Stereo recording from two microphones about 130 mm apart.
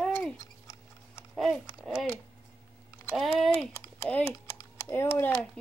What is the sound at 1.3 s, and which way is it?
Speech, centre (ahead or behind).